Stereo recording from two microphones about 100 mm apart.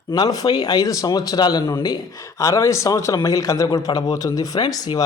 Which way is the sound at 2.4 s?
30° left (ahead or behind).